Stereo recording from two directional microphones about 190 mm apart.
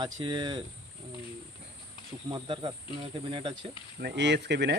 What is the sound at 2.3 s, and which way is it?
Speech, 25° right (ahead or behind).